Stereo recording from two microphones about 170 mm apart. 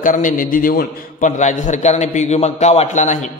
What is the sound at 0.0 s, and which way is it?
A man's voice, 50° left (ahead or behind).